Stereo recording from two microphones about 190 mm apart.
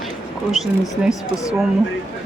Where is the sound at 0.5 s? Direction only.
Centre (ahead or behind).